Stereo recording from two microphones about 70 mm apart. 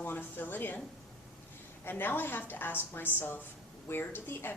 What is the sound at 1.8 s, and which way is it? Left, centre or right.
A woman's voice, left.